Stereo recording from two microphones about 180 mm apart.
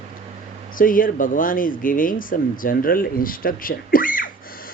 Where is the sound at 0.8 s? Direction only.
50° left (ahead or behind).